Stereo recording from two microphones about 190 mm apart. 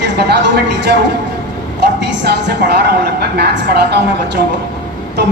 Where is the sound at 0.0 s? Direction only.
60° right (ahead or behind).